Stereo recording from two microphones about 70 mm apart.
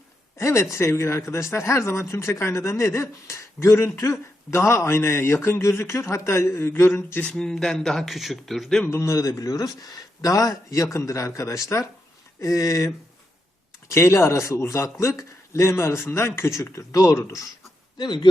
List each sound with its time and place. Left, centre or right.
0.3 s speech: left
7.3 s speech: centre
8.9 s speech: left
17.9 s speech: left